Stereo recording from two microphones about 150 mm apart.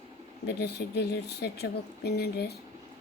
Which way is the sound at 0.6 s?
90° left.